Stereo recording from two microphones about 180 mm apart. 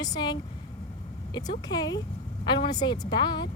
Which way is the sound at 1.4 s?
20° left (ahead or behind).